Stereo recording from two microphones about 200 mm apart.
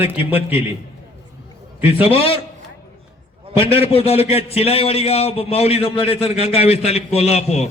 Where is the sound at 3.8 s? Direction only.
30° left (ahead or behind).